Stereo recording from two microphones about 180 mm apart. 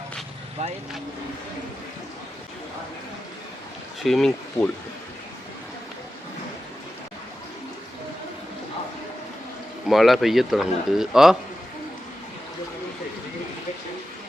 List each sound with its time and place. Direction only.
0.6 s speech: 35° right (ahead or behind)
4.0 s speech: centre (ahead or behind)
9.8 s speech: centre (ahead or behind)